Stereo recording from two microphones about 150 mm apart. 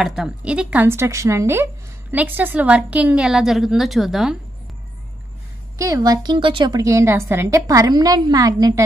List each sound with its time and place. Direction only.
0.0 s speech: 5° right (ahead or behind)
5.8 s a woman's voice: 20° right (ahead or behind)